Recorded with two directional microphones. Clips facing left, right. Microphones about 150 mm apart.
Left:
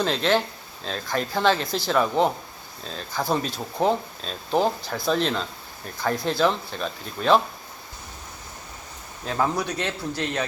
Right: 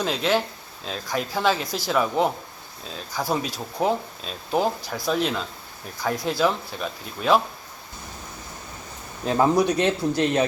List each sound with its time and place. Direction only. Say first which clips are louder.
0.0 s speech: left 1 dB; 10° right (ahead or behind)
9.2 s speech: right 6 dB; 20° right (ahead or behind)